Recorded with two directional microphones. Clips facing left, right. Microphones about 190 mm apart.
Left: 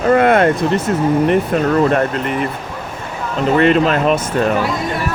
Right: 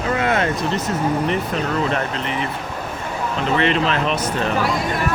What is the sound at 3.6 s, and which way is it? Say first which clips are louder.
Speech: left 7 dB; 45° left (ahead or behind).